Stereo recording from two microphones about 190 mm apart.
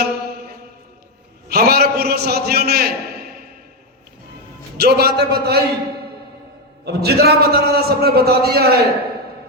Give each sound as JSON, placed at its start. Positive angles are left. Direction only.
{"t": 0.0, "sound": "mantra", "side_deg": -55}
{"t": 1.5, "sound": "a sound", "side_deg": -55}
{"t": 4.8, "sound": "a man's voice", "side_deg": -55}
{"t": 6.8, "sound": "a man's voice", "side_deg": -55}